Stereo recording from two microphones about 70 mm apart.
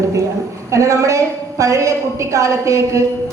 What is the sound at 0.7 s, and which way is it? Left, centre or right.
Speech, right.